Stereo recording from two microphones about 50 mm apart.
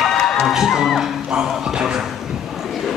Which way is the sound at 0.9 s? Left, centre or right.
Centre.